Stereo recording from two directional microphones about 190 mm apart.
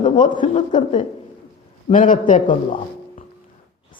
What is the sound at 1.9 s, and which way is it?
Speech, 45° left (ahead or behind).